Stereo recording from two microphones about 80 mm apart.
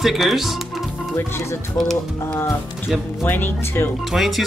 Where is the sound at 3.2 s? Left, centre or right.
Left.